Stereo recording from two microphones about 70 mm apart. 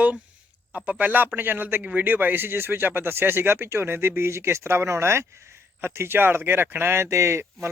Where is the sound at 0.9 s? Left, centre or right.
Right.